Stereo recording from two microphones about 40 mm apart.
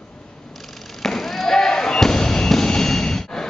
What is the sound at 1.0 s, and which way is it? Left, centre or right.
Basketball bounce, centre.